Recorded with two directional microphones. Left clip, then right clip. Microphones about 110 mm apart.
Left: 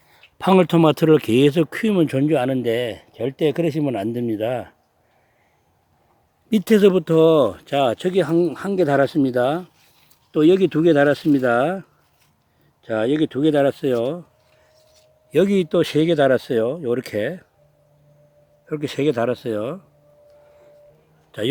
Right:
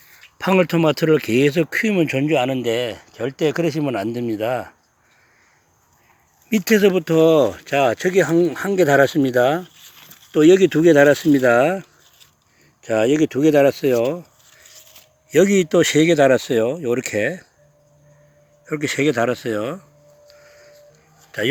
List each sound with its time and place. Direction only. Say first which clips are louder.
0.1 s speech: left 2 dB; 35° left (ahead or behind)
6.5 s speech: even; 60° left (ahead or behind)
7.0 s speech: even; 35° left (ahead or behind)
7.4 s speech: right 2 dB; 25° left (ahead or behind)
8.1 s speech: right 2 dB; 5° left (ahead or behind)
15.3 s speech: right 3 dB; 5° right (ahead or behind)
18.6 s speech: right 2 dB; centre (ahead or behind)